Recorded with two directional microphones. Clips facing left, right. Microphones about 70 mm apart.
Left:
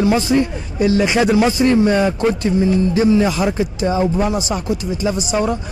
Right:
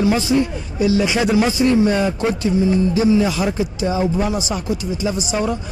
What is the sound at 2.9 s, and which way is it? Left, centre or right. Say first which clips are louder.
Speech: left 1 dB; left.